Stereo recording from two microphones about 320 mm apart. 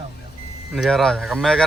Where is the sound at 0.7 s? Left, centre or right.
Centre.